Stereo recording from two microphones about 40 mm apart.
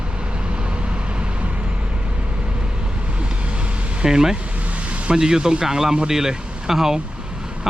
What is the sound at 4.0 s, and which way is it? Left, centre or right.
Speech, centre.